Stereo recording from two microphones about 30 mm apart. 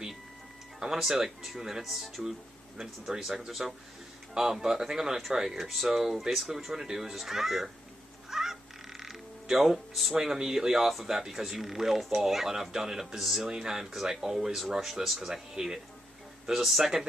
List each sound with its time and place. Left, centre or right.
0.7 s speech: right
1.0 s speech: centre
8.3 s music: centre
10.2 s speech: centre
13.5 s speech: centre
15.2 s speech: centre